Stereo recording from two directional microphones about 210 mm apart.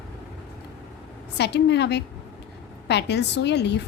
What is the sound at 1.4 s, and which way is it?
A woman's voice, 55° left (ahead or behind).